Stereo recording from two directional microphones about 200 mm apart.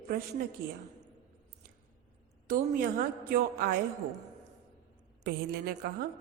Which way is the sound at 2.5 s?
45° right (ahead or behind).